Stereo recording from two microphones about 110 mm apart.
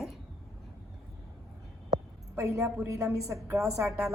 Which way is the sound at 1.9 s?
30° right (ahead or behind).